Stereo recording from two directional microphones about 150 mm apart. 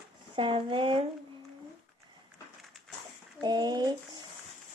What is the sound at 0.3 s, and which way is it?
Speech, 35° right (ahead or behind).